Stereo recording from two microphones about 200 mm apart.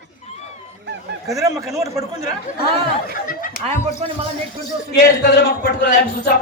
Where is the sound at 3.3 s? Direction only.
45° left (ahead or behind).